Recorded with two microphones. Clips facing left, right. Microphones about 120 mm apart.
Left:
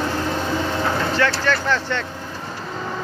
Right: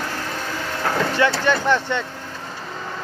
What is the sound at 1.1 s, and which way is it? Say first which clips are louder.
Vehicle: right 1 dB; 15° right (ahead or behind).